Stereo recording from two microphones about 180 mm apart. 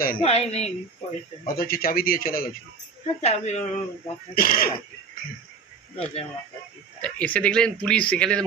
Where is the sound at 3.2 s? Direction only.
35° left (ahead or behind).